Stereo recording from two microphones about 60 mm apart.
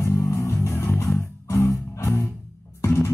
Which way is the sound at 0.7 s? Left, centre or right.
Left.